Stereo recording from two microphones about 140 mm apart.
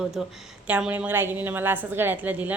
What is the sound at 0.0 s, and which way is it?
A woman's voice, 5° right (ahead or behind).